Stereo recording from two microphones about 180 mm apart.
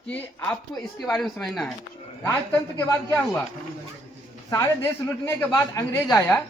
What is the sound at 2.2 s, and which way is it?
Speech, 15° left (ahead or behind).